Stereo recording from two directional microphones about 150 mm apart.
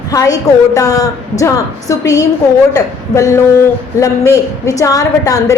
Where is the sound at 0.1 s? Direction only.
20° left (ahead or behind).